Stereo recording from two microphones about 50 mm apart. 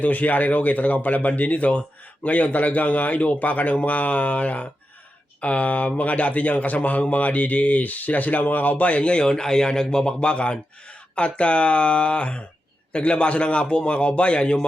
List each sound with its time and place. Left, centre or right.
0.0 s a man's voice: left